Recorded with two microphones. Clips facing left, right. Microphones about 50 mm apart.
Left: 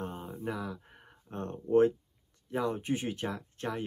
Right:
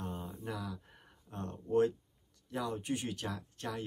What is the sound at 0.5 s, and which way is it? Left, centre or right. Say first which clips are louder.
Speech: left 5 dB; left.